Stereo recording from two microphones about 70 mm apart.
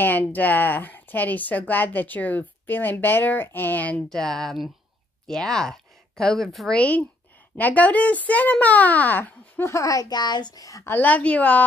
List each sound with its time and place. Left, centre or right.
0.0 s speech: left
4.1 s speech: centre
6.7 s speech: centre
9.7 s a child's voice: left
10.0 s a child's voice: left
10.8 s a woman's voice: left
11.1 s speech: left